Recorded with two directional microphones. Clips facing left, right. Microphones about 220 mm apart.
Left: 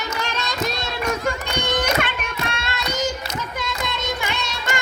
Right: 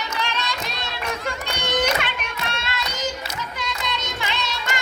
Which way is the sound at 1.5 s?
45° left (ahead or behind).